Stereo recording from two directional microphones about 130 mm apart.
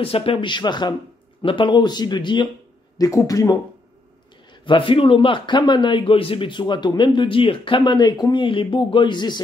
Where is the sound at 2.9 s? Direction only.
25° left (ahead or behind).